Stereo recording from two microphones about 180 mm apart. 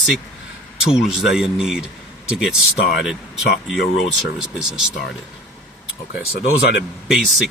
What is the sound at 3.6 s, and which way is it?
Speech, centre (ahead or behind).